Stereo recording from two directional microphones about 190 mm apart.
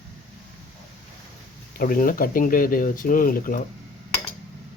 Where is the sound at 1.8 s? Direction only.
45° left (ahead or behind).